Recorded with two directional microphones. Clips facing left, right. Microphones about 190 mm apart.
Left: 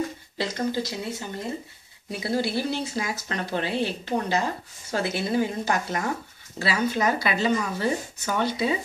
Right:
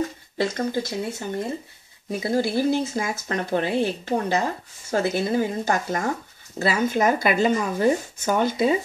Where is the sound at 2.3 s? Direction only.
45° right (ahead or behind).